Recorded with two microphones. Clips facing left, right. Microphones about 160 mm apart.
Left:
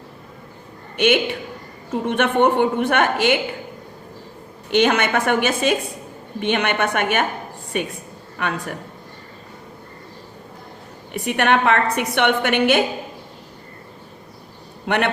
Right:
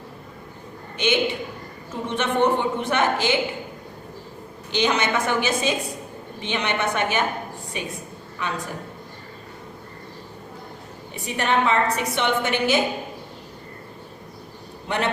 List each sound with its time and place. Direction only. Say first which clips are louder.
0.9 s a man's voice: left 4 dB; 60° left (ahead or behind)
4.7 s a woman's voice: left 5 dB; 55° left (ahead or behind)
11.1 s a woman's voice: left 5 dB; 65° left (ahead or behind)
14.8 s a man's voice: left 4 dB; 65° left (ahead or behind)